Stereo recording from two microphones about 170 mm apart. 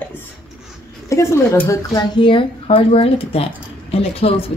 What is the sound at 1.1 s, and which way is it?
Speech, 15° left (ahead or behind).